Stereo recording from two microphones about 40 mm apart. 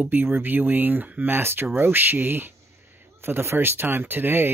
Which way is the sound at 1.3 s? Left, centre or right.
Right.